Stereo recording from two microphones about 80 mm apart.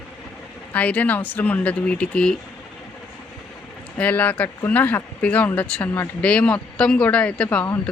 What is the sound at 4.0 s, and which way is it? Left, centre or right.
Speech, left.